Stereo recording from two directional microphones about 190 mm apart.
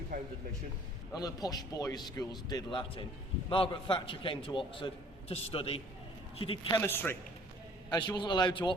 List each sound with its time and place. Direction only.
1.1 s a man's voice: 20° left (ahead or behind)
6.7 s a man's voice: 10° left (ahead or behind)
7.9 s a man's voice: 25° left (ahead or behind)